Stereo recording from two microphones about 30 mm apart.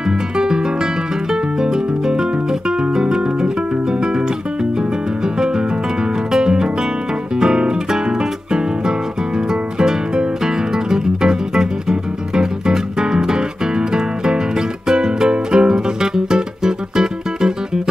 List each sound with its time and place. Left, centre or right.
1.3 s music: centre
6.3 s music: right
9.5 s music: right